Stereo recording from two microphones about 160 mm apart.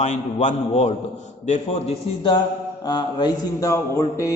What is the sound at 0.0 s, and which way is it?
A man's voice, 45° left (ahead or behind).